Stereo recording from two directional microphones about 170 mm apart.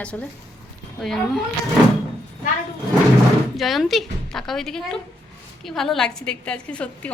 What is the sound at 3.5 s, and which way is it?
A woman's voice, centre (ahead or behind).